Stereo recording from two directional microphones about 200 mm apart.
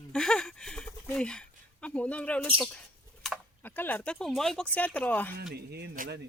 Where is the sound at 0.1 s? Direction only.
5° left (ahead or behind).